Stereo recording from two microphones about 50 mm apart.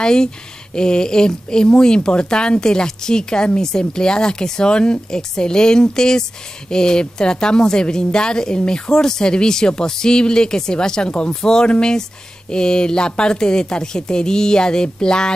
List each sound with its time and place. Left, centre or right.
0.0 s speech: centre